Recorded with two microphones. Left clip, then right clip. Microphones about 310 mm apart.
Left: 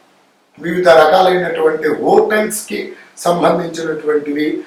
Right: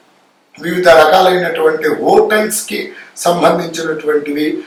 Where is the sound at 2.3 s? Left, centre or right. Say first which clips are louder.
Right 2 dB; centre.